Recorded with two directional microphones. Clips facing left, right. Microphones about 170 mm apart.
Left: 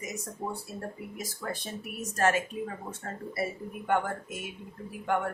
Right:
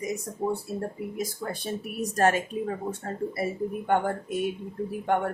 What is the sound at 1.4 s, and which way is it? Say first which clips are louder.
Speech: right 4 dB; 30° right (ahead or behind).